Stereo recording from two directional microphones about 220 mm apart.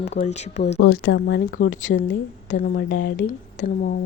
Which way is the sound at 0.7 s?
70° left (ahead or behind).